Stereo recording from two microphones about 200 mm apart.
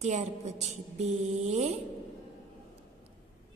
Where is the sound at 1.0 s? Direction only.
35° right (ahead or behind).